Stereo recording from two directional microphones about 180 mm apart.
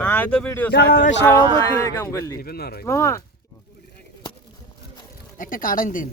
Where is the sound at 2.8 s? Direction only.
15° left (ahead or behind).